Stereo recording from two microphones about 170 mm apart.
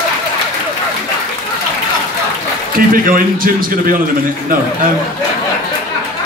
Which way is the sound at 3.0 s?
55° right (ahead or behind).